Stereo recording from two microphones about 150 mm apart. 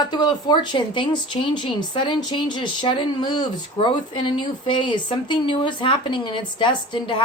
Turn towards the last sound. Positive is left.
turn(degrees=35)  # may be behind; listen again after turning